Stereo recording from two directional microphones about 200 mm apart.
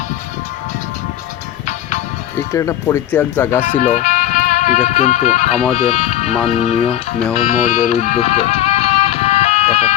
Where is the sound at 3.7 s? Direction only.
40° left (ahead or behind).